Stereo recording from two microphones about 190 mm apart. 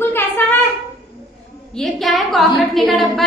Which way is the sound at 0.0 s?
10° left (ahead or behind).